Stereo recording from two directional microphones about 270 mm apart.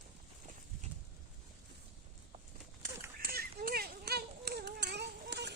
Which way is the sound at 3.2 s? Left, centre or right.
Right.